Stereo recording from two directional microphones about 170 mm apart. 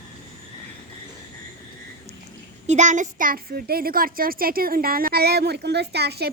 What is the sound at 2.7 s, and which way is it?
A woman's voice, 45° right (ahead or behind).